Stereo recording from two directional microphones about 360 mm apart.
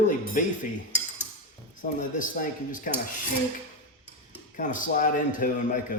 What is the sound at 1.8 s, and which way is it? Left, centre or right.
A man's voice, left.